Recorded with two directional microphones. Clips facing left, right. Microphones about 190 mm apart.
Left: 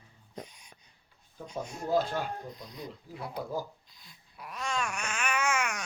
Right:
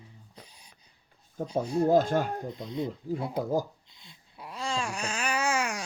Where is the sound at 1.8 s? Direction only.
45° right (ahead or behind).